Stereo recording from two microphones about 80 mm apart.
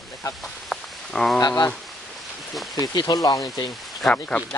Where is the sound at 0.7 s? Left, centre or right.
Centre.